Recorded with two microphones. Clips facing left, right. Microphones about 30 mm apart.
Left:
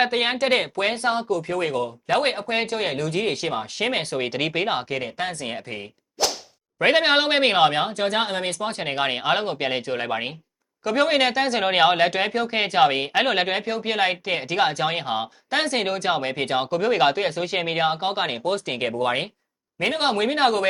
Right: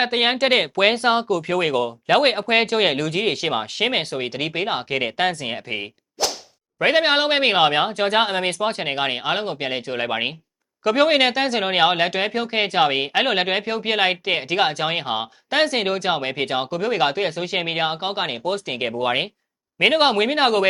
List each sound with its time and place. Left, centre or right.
0.0 s speech: right
0.8 s speech: right
2.1 s speech: right
3.8 s speech: centre
4.1 s speech: centre
5.0 s speech: right
5.4 s speech: right
6.2 s whip: centre
6.7 s speech: centre
10.1 s speech: right
11.5 s speech: centre
19.8 s speech: right
20.1 s speech: centre